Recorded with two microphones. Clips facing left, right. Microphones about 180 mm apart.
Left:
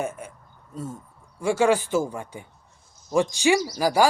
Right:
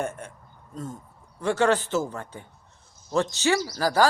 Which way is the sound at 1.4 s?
10° left (ahead or behind).